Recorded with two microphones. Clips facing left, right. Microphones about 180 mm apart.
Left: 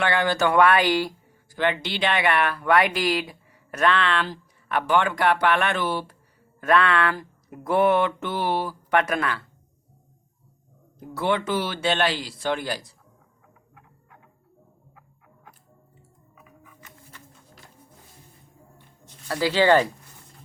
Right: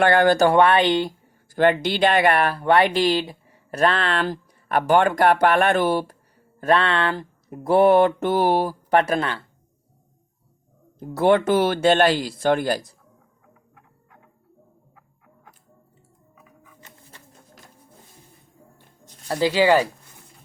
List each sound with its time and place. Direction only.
0.0 s speech: 45° right (ahead or behind); by 1.1 s 25° right (ahead or behind)
1.5 s speech: 45° right (ahead or behind)
6.6 s speech: 30° right (ahead or behind)
11.1 s speech: 45° right (ahead or behind)
16.8 s pigeon: 25° right (ahead or behind)
19.3 s speech: 20° right (ahead or behind)